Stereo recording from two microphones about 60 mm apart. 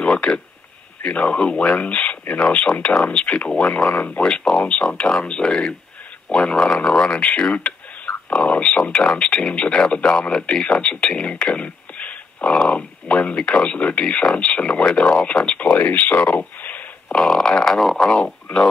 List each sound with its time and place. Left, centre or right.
0.0 s a sound: centre
1.0 s speech: left
4.2 s speech: centre
17.1 s speech: centre
18.0 s speech: centre